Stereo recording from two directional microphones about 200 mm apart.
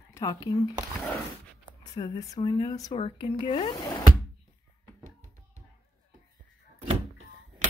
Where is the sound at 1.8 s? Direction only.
20° left (ahead or behind).